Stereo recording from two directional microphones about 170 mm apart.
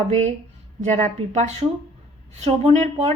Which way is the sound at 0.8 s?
45° right (ahead or behind).